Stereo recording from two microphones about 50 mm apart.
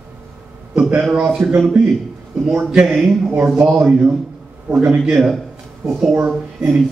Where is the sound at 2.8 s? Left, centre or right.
Centre.